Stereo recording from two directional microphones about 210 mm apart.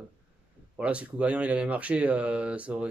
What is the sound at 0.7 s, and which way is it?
Speech, 5° right (ahead or behind).